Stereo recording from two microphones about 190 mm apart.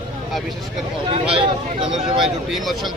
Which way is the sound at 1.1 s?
30° right (ahead or behind).